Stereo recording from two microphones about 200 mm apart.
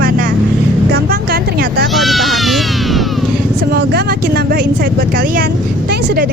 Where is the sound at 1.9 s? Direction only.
Centre (ahead or behind).